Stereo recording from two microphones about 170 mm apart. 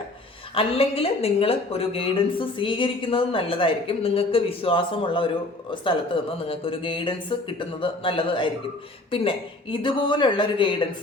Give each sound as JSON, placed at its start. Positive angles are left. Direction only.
{"t": 0.5, "sound": "speech", "side_deg": 35}